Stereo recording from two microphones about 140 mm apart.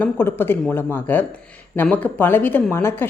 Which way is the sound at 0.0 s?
15° left (ahead or behind).